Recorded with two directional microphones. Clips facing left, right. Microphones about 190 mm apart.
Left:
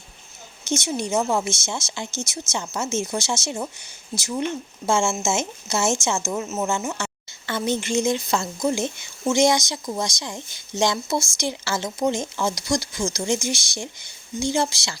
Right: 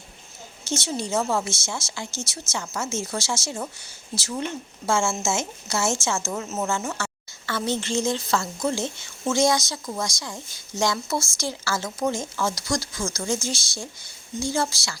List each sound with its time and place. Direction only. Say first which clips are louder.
0.6 s a woman's voice: left 3 dB; 15° left (ahead or behind)
4.9 s a woman's voice: left 2 dB; 20° left (ahead or behind)